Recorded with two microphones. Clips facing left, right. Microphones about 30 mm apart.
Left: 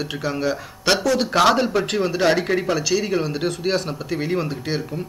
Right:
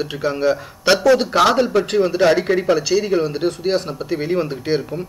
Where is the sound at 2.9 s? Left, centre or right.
Centre.